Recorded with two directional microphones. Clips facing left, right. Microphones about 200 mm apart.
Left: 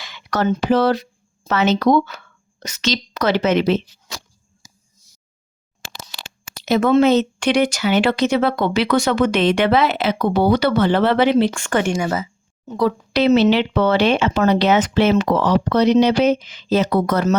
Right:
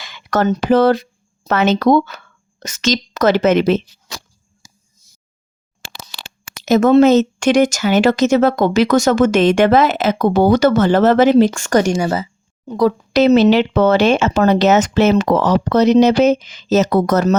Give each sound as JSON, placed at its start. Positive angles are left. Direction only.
{"t": 0.0, "sound": "a woman's voice", "side_deg": -50}
{"t": 6.6, "sound": "speech", "side_deg": -45}